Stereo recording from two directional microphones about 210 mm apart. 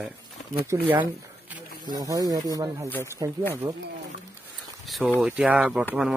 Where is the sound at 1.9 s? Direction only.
15° right (ahead or behind).